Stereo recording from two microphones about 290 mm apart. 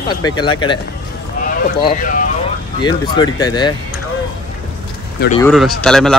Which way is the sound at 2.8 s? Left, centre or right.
Centre.